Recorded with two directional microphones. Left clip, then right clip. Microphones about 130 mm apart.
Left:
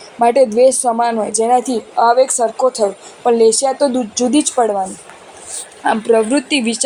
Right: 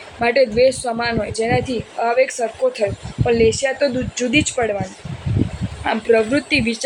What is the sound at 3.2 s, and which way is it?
Speech, 35° left (ahead or behind).